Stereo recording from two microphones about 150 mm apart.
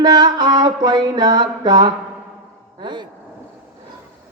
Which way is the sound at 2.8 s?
30° right (ahead or behind).